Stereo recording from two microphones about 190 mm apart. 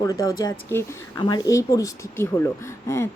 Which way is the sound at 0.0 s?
20° left (ahead or behind).